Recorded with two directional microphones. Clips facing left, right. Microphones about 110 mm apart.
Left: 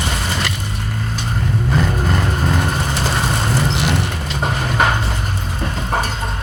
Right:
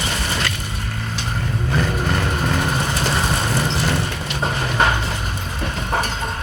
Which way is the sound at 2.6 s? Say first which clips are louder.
Left 1 dB; centre (ahead or behind).